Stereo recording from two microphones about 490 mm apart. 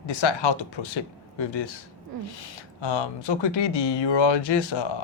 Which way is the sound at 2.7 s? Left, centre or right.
Left.